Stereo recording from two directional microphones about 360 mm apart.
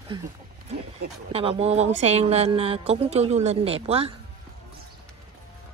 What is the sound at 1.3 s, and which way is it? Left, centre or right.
Speech, centre.